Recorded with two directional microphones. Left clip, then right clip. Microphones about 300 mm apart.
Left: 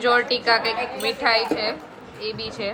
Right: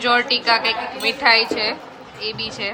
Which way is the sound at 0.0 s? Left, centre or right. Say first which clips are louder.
Right 2 dB; centre.